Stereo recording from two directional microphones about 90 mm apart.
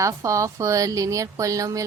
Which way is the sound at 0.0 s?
35° right (ahead or behind).